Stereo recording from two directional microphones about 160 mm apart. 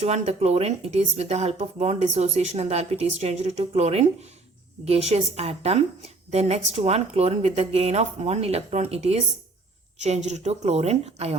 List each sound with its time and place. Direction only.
0.0 s a woman's voice: 40° right (ahead or behind)